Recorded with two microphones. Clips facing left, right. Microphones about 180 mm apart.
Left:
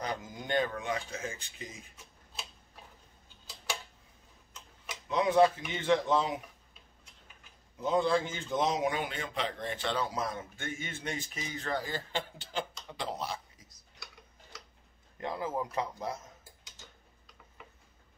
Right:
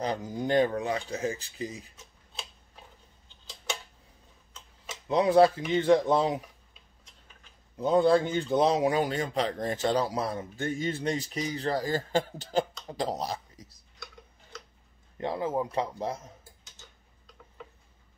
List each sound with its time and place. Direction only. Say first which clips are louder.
0.0 s a man's voice: right 7 dB; 35° right (ahead or behind)
5.0 s a man's voice: right 4 dB; 35° right (ahead or behind)
7.8 s a man's voice: right 6 dB; 35° right (ahead or behind)
13.6 s a sound: right 10 dB; 35° right (ahead or behind)
15.1 s a man's voice: right 5 dB; 30° right (ahead or behind)